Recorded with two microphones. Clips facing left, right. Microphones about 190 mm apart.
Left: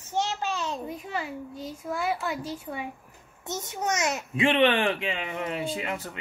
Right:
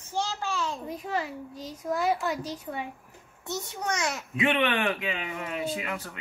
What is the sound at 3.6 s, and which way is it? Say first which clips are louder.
A child's voice: left 3 dB; 20° left (ahead or behind).